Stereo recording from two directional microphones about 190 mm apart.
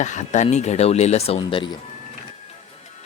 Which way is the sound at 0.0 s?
40° left (ahead or behind).